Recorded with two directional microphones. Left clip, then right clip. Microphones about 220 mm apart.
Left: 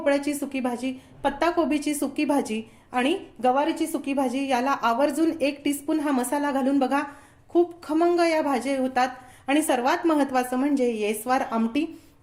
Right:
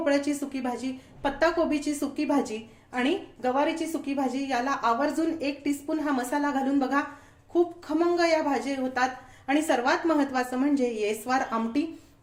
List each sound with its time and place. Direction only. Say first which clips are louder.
0.0 s a woman's voice: left 2 dB; 30° left (ahead or behind)